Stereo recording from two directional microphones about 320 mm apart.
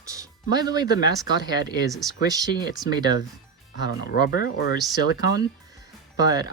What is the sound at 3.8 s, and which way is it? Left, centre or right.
Speech, left.